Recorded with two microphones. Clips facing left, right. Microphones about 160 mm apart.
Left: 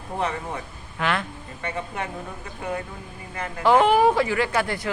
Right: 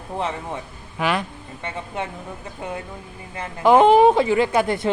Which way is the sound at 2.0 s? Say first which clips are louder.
Right 6 dB; 25° right (ahead or behind).